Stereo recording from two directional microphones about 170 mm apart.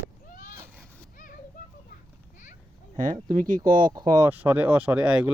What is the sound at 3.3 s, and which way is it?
Speech, 55° right (ahead or behind).